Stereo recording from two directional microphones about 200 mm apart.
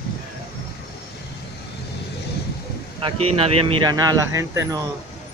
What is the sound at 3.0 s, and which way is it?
Speech, 30° right (ahead or behind).